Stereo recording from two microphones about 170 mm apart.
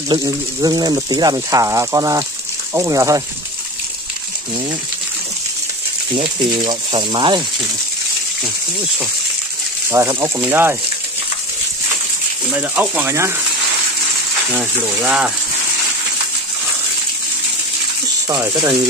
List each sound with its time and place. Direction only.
0.1 s speech: 20° right (ahead or behind)
6.1 s speech: 30° right (ahead or behind)
9.8 s speech: 15° right (ahead or behind)
12.4 s speech: 10° right (ahead or behind)
14.5 s speech: 10° right (ahead or behind)
18.3 s speech: 20° right (ahead or behind)